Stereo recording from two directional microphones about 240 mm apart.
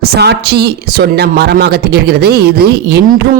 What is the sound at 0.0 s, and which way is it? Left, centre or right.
A man's voice, right.